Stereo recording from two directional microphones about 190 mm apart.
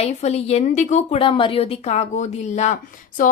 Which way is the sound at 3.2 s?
45° left (ahead or behind).